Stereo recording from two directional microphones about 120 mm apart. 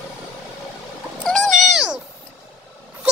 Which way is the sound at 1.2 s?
5° left (ahead or behind).